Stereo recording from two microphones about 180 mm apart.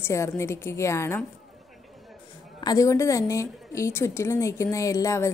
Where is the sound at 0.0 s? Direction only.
15° left (ahead or behind).